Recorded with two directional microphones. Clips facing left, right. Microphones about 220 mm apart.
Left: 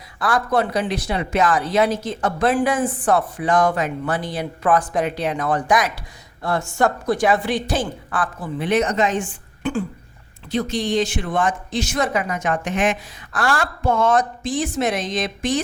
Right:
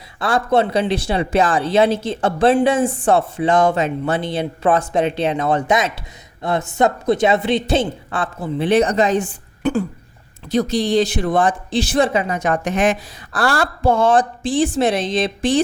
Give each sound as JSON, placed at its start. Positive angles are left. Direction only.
{"t": 0.2, "sound": "speech", "side_deg": -25}